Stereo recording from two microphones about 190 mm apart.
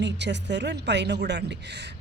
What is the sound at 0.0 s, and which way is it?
Speech, 65° right (ahead or behind).